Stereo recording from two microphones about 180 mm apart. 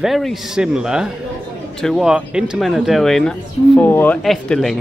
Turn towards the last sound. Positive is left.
turn(degrees=0)  # may be behind; listen again after turning